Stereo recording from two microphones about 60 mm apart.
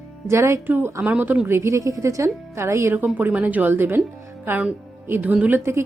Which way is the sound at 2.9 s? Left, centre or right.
Right.